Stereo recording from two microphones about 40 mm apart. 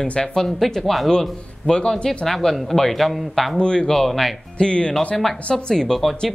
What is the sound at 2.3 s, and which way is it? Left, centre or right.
Speech, centre.